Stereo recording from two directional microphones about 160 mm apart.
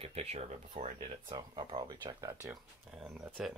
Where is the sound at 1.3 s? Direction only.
25° right (ahead or behind).